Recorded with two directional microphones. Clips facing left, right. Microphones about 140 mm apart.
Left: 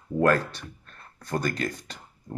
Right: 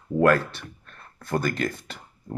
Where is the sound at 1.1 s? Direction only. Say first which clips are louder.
Right 3 dB; 50° right (ahead or behind).